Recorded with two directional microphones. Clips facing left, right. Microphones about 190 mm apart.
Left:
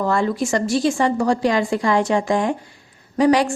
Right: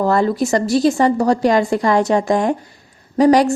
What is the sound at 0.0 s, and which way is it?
A woman's voice, 40° right (ahead or behind).